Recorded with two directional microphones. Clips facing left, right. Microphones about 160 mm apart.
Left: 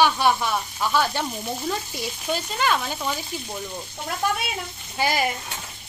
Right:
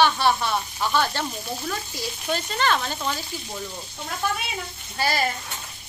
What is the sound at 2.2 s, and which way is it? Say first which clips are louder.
Stir: even; 5° left (ahead or behind).